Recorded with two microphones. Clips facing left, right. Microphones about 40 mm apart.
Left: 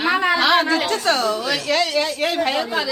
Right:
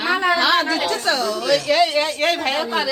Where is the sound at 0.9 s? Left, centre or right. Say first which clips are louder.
Left 1 dB; left.